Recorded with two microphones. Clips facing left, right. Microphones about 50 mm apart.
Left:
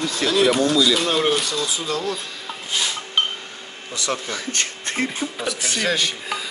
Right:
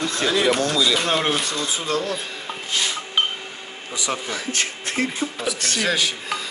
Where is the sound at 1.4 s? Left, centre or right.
Right.